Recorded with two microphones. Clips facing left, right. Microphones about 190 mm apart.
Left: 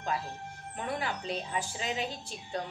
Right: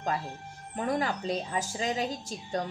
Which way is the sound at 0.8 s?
40° right (ahead or behind).